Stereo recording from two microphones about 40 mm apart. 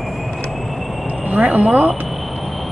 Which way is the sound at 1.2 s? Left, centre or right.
Right.